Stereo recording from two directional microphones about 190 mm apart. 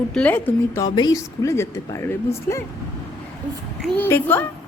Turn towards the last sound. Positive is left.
turn(degrees=10)  # may be behind; listen again after turning